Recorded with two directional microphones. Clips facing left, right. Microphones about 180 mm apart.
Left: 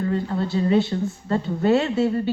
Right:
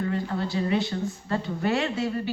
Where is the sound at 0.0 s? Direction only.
30° left (ahead or behind).